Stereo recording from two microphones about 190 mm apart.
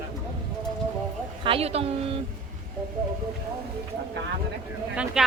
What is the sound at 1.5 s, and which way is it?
Speech, 30° right (ahead or behind).